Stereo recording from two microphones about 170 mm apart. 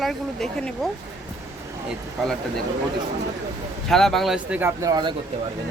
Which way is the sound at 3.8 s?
Centre (ahead or behind).